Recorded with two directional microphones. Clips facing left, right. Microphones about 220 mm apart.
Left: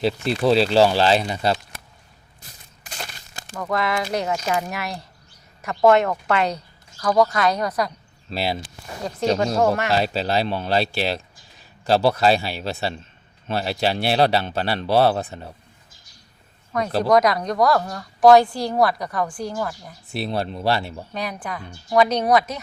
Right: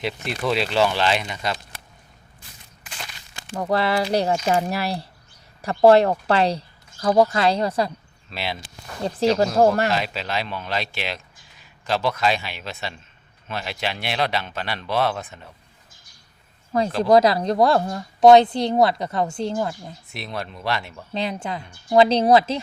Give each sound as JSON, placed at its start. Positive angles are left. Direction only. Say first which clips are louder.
{"t": 0.0, "sound": "speech", "louder": "left 6 dB", "side_deg": 35}
{"t": 2.4, "sound": "a sound", "louder": "left 2 dB", "side_deg": 40}
{"t": 3.5, "sound": "speech", "louder": "right 2 dB", "side_deg": -30}
{"t": 8.3, "sound": "speech", "louder": "left 5 dB", "side_deg": 35}
{"t": 9.6, "sound": "speech", "louder": "right 3 dB", "side_deg": -35}
{"t": 9.9, "sound": "speech", "louder": "left 5 dB", "side_deg": 35}
{"t": 17.0, "sound": "speech", "louder": "right 2 dB", "side_deg": -30}
{"t": 20.1, "sound": "speech", "louder": "left 7 dB", "side_deg": 30}
{"t": 21.1, "sound": "speech", "louder": "right 5 dB", "side_deg": -25}